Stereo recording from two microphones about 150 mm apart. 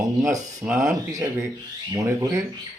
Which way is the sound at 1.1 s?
25° right (ahead or behind).